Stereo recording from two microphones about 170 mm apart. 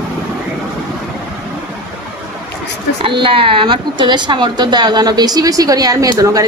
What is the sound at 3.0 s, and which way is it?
A woman's voice, 30° right (ahead or behind).